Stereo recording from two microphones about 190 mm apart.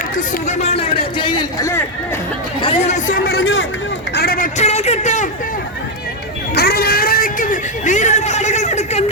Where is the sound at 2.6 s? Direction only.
40° left (ahead or behind).